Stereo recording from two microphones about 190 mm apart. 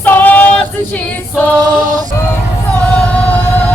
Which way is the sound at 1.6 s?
20° right (ahead or behind).